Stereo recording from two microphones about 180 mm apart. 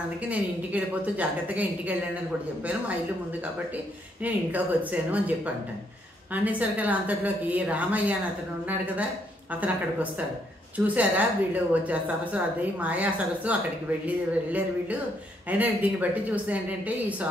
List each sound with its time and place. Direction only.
0.3 s a woman's voice: 10° right (ahead or behind)
10.8 s a woman's voice: 10° right (ahead or behind)